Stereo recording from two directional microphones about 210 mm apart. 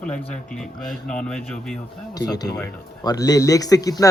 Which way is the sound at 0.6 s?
5° left (ahead or behind).